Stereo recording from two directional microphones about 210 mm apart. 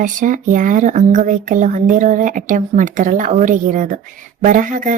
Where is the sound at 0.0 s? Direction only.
40° right (ahead or behind).